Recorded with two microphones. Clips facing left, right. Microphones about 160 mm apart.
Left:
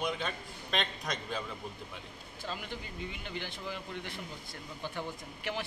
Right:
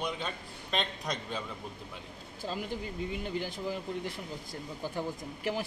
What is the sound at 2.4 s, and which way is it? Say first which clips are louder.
Speech: right 5 dB; 35° right (ahead or behind).